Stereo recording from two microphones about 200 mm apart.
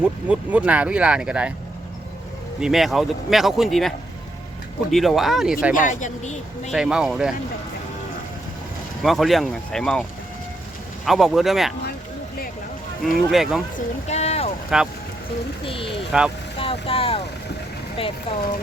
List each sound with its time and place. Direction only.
0.0 s speech: 5° right (ahead or behind)
2.6 s speech: centre (ahead or behind)
5.7 s speech: 40° left (ahead or behind)
6.7 s speech: 5° right (ahead or behind)
9.0 s speech: centre (ahead or behind)
13.3 s speech: centre (ahead or behind)
13.7 s speech: 35° left (ahead or behind)
14.7 s speech: centre (ahead or behind)
15.6 s speech: 25° left (ahead or behind)
16.1 s speech: 5° right (ahead or behind)
16.6 s speech: 25° left (ahead or behind)